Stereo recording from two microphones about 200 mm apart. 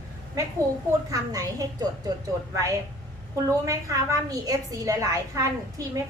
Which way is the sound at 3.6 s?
15° right (ahead or behind).